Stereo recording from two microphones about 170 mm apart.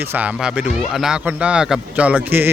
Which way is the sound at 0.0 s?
10° right (ahead or behind).